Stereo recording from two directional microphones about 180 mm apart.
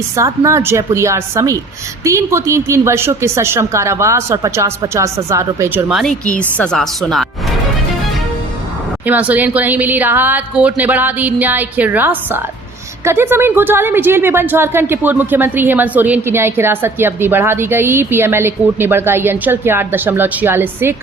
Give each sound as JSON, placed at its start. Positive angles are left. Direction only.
{"t": 0.2, "sound": "a woman's voice", "side_deg": -15}
{"t": 6.0, "sound": "a woman's voice", "side_deg": 5}
{"t": 9.0, "sound": "a woman's voice", "side_deg": -10}